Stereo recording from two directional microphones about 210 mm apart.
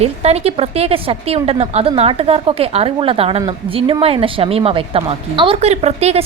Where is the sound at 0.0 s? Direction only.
30° right (ahead or behind).